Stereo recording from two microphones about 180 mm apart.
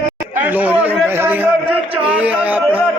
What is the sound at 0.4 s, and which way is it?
Chatter, 10° right (ahead or behind).